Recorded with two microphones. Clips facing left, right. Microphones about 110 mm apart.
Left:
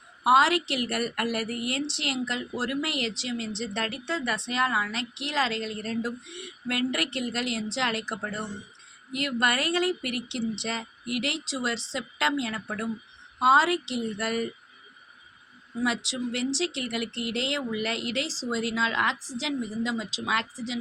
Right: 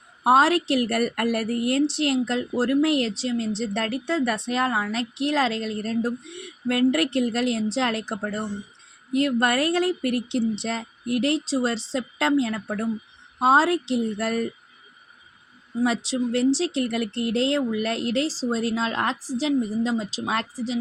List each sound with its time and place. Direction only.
0.3 s a woman's voice: 45° right (ahead or behind)
15.8 s a woman's voice: 40° right (ahead or behind)